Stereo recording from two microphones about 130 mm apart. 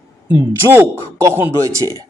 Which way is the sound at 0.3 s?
20° right (ahead or behind).